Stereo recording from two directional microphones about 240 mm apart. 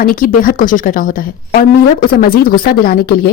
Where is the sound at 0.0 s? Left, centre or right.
Left.